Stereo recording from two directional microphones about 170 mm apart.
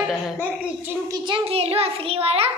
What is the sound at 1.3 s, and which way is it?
A child's voice, 35° right (ahead or behind).